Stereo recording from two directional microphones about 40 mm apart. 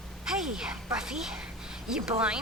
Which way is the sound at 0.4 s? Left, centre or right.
Centre.